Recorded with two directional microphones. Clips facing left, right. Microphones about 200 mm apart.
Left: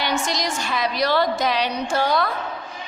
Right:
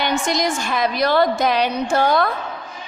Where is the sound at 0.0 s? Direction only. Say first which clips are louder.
Right 4 dB; 50° right (ahead or behind).